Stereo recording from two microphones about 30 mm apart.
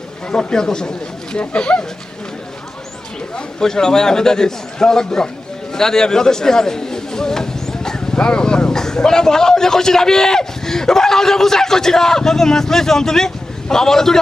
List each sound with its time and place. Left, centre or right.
0.3 s a man's voice: left
1.4 s speech: left
3.6 s a man's voice: left